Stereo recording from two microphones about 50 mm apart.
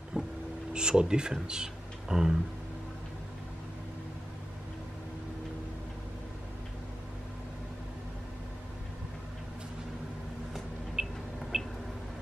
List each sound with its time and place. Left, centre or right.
0.2 s vehicle: centre
0.7 s speech: centre
11.0 s a sound: centre